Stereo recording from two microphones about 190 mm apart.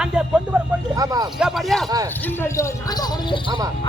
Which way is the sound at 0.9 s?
20° right (ahead or behind).